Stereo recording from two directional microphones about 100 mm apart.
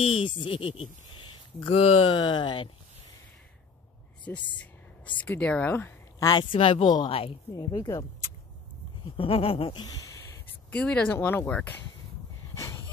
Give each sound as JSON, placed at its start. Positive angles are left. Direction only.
{"t": 0.1, "sound": "speech", "side_deg": 60}
{"t": 2.1, "sound": "speech", "side_deg": 55}
{"t": 4.3, "sound": "speech", "side_deg": 15}
{"t": 6.1, "sound": "a woman's voice", "side_deg": 40}
{"t": 6.5, "sound": "speech", "side_deg": 65}
{"t": 7.1, "sound": "a sound", "side_deg": 75}
{"t": 7.5, "sound": "a woman's voice", "side_deg": 45}
{"t": 9.1, "sound": "a sound", "side_deg": 65}
{"t": 9.8, "sound": "speech", "side_deg": 45}
{"t": 10.7, "sound": "speech", "side_deg": 10}
{"t": 11.1, "sound": "speech", "side_deg": 20}
{"t": 12.5, "sound": "a sound", "side_deg": 30}